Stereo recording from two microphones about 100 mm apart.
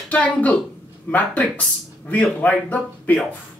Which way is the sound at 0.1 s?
15° left (ahead or behind).